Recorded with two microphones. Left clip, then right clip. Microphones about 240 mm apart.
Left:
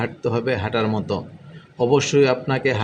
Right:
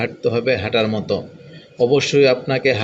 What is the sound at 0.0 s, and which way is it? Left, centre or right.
A man's voice, centre.